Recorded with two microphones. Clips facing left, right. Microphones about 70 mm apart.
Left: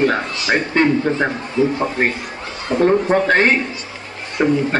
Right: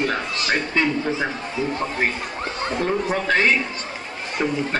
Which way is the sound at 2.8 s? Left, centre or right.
Left.